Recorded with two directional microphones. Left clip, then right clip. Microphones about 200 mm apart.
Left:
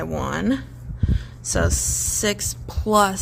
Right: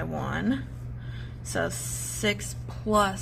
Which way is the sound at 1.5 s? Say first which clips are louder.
Left 7 dB; 50° left (ahead or behind).